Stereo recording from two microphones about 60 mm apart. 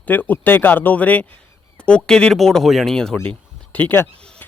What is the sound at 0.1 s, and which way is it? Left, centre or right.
Speech, left.